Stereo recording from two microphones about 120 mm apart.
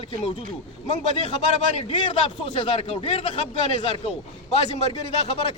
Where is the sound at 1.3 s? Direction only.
55° left (ahead or behind).